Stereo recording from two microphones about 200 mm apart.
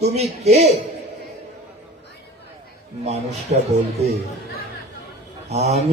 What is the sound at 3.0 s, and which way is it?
A man's voice, 35° right (ahead or behind).